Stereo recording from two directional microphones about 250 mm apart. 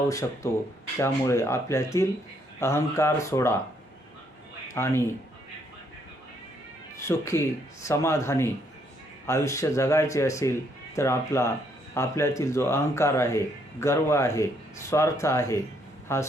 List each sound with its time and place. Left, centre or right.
0.1 s speech: centre
4.7 s speech: centre
7.1 s speech: centre